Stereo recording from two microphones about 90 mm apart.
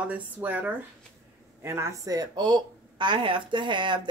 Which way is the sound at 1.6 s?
35° right (ahead or behind).